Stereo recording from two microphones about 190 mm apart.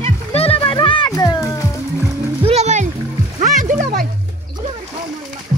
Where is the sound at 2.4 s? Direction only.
35° right (ahead or behind).